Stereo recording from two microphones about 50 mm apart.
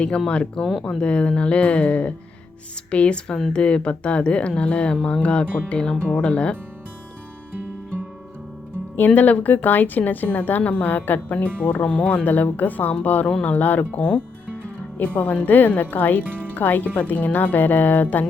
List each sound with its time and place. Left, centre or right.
0.3 s speech: centre
9.0 s speech: left
11.6 s speech: left
14.6 s music: left
15.4 s speech: left